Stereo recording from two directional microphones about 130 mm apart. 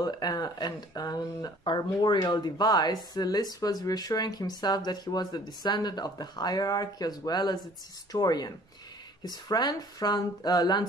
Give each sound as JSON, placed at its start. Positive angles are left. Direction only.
{"t": 0.0, "sound": "speech", "side_deg": 30}